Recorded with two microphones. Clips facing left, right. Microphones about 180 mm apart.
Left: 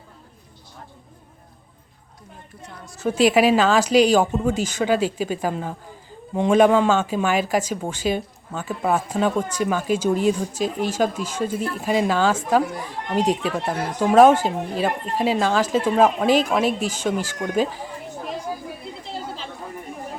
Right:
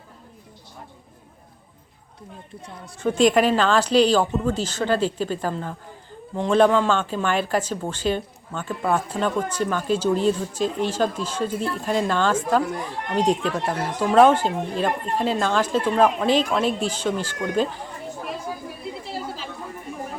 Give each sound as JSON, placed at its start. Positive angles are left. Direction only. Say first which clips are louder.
{"t": 3.0, "sound": "speech", "louder": "left 1 dB", "side_deg": 5}